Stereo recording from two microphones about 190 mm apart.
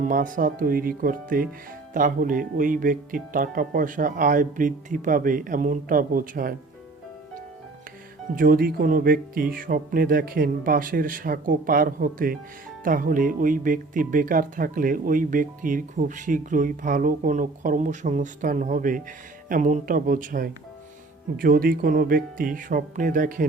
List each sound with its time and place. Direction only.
0.0 s speech: 45° right (ahead or behind)
8.4 s speech: 50° right (ahead or behind)